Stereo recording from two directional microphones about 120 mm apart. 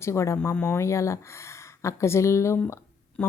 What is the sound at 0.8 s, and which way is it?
Speech, 25° left (ahead or behind).